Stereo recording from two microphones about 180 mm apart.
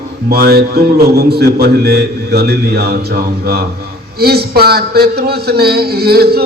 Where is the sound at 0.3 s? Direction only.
60° right (ahead or behind).